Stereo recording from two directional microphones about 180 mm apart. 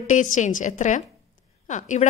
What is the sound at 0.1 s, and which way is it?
A woman's voice, 45° left (ahead or behind).